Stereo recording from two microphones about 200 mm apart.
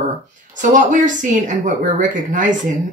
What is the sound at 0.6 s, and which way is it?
Speech, 40° right (ahead or behind).